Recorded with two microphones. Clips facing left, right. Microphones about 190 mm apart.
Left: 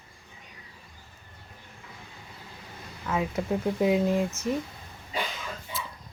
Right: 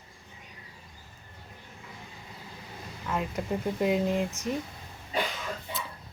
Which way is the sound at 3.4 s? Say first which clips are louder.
Left 3 dB; centre (ahead or behind).